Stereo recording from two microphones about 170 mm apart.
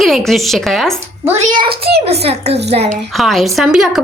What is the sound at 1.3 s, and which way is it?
Speech, 45° right (ahead or behind).